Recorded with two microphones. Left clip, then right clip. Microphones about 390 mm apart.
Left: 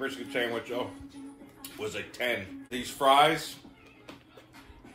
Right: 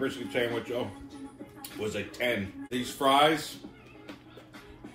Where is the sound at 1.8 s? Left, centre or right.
Centre.